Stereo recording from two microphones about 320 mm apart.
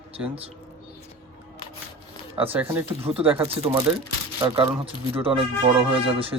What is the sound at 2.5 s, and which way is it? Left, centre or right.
Speech, centre.